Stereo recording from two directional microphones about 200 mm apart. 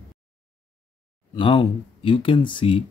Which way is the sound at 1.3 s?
25° left (ahead or behind).